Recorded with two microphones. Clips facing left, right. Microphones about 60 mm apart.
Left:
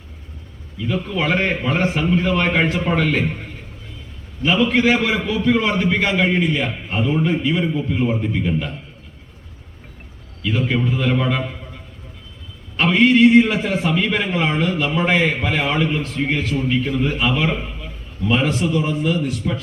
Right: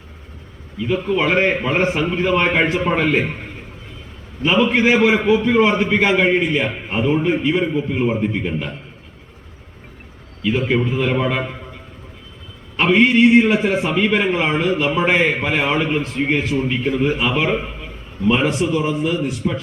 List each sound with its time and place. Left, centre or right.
0.9 s a man's voice: centre
4.4 s a man's voice: centre
10.5 s a man's voice: centre
12.7 s a man's voice: centre
16.8 s a man's voice: centre